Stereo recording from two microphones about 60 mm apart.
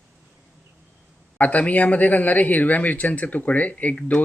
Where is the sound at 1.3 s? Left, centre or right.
Left.